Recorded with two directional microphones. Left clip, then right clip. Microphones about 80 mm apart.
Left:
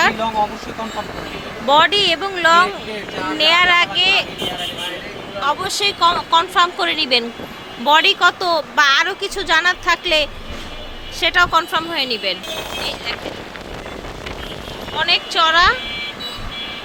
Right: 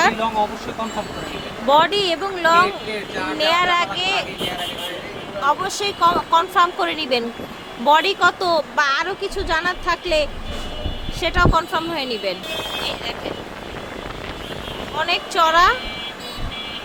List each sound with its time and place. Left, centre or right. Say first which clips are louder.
1.6 s a woman's voice: left 3 dB; centre
5.4 s a woman's voice: left 1 dB; centre
8.7 s a woman's voice: left 5 dB; centre
9.0 s a woman's voice: left 4 dB; centre
14.9 s speech: left 3 dB; centre